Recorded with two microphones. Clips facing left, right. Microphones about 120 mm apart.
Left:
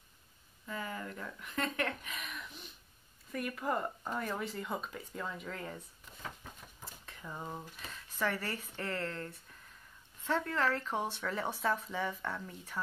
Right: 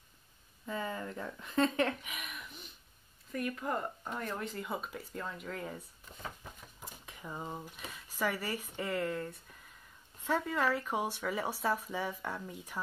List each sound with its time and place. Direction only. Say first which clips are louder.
0.7 s speech: right 3 dB; 25° right (ahead or behind)
2.0 s a sound: left 1 dB; 5° right (ahead or behind)
3.3 s speech: even; centre (ahead or behind)
6.8 s speech: right 3 dB; 15° right (ahead or behind)